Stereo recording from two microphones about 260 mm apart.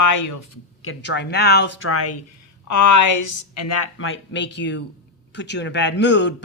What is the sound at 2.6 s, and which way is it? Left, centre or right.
Speech, left.